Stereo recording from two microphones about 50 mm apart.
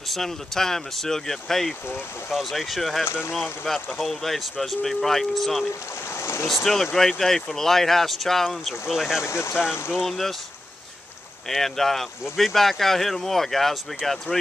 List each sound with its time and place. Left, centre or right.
0.1 s speech: centre
3.1 s speech: left
3.6 s speech: centre
6.1 s boat: left
6.5 s speech: centre
8.6 s speech: centre
9.2 s speech: left
9.6 s speech: centre
10.0 s speech: centre
11.4 s speech: centre